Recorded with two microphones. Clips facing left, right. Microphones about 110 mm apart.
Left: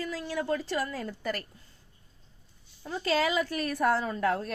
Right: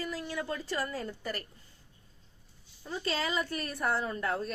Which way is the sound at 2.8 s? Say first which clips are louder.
Left 6 dB; 85° left.